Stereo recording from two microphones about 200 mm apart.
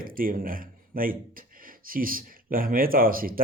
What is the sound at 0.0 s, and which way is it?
Speech, 45° right (ahead or behind).